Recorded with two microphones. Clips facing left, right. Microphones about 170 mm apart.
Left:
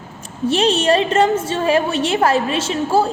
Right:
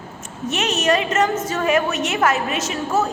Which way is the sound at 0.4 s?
30° left (ahead or behind).